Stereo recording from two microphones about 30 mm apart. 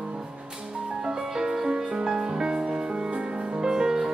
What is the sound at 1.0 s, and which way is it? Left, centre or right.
Music, right.